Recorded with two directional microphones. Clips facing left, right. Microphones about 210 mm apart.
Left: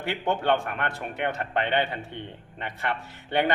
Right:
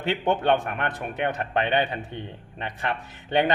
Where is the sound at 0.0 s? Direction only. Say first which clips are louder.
Right 3 dB; 20° right (ahead or behind).